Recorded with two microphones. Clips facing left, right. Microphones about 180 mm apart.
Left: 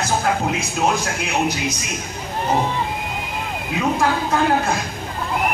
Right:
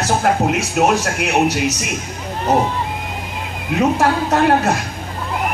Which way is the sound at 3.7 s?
65° right (ahead or behind).